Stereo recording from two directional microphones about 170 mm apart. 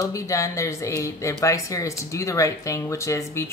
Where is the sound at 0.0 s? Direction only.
20° left (ahead or behind).